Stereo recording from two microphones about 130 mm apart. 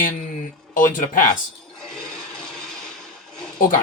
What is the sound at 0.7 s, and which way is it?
Speech, 90° left.